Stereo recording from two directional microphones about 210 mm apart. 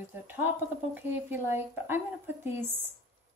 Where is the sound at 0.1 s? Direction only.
10° right (ahead or behind).